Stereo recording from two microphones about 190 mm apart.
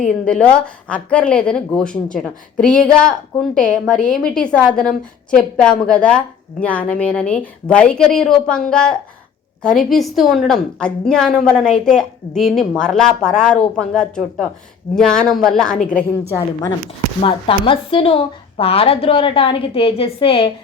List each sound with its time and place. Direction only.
0.0 s a woman's voice: 5° left (ahead or behind)
14.9 s a woman's voice: 5° left (ahead or behind)
17.2 s a woman's voice: 30° left (ahead or behind)